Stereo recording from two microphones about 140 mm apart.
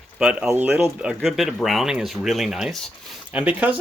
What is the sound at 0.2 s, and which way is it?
Speech, 5° right (ahead or behind).